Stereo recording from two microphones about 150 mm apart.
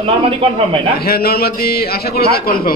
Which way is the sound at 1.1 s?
90° left.